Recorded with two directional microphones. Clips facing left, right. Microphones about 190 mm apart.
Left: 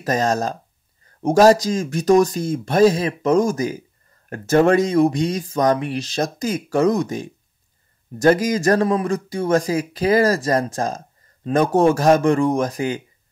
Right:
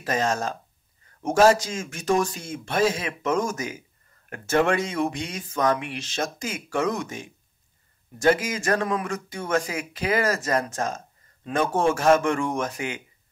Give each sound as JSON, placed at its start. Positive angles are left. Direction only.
{"t": 0.0, "sound": "speech", "side_deg": 40}